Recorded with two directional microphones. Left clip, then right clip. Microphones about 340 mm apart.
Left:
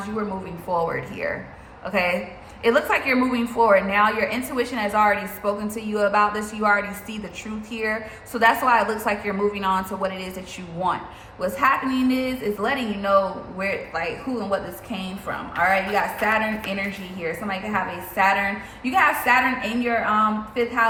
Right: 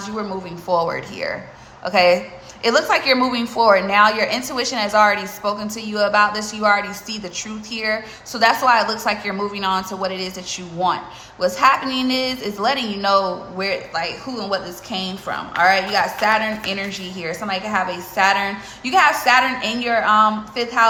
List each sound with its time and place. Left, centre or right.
0.7 s a woman's voice: centre